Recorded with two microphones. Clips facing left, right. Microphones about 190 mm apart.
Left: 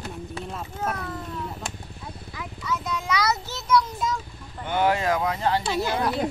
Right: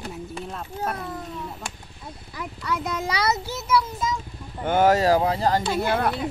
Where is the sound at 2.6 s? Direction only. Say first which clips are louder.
Right 1 dB; 55° right (ahead or behind).